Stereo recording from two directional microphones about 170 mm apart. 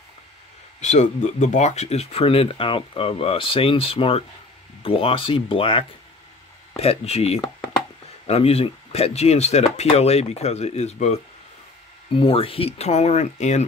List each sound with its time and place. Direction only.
0.7 s speech: 45° left (ahead or behind)